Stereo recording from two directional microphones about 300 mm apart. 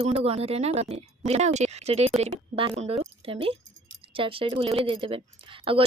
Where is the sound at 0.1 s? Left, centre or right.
Centre.